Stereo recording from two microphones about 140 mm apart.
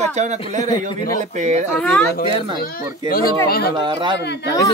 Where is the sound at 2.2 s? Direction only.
35° right (ahead or behind).